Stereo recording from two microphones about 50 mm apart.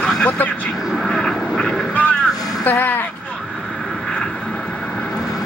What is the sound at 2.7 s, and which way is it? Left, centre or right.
Speech, left.